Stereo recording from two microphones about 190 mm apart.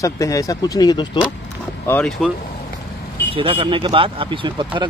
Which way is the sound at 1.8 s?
10° left (ahead or behind).